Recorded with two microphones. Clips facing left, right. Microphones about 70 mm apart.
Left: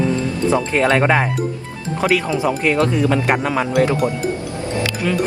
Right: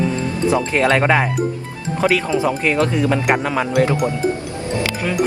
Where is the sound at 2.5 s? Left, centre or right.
Centre.